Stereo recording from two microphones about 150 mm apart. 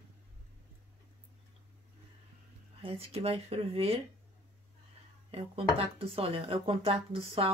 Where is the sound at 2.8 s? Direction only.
40° right (ahead or behind).